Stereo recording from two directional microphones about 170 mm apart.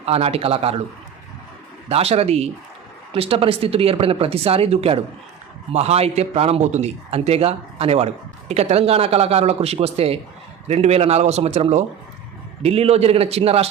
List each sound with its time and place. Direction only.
0.0 s a man's voice: 35° right (ahead or behind)
1.9 s a man's voice: 35° right (ahead or behind)